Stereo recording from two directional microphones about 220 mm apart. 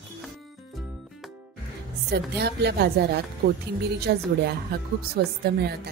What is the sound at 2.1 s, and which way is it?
A woman's voice, 50° right (ahead or behind).